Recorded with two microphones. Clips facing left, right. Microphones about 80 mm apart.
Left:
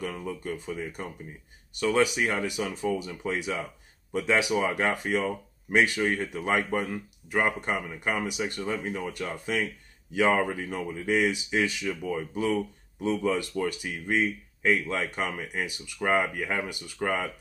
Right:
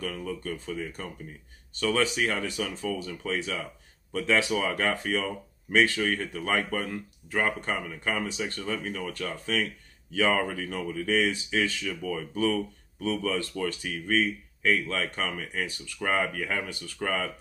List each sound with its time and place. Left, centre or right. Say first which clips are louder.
0.1 s speech: even; centre